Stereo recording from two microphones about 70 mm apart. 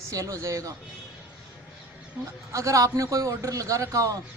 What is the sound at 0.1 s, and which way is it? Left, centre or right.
Speech, right.